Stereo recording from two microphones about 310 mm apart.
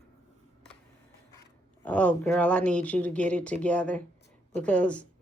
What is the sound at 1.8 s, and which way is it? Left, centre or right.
Speech, centre.